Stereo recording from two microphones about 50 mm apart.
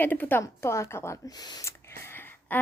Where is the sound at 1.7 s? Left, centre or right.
Left.